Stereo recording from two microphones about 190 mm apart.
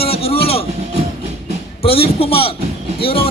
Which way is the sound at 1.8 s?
30° left (ahead or behind).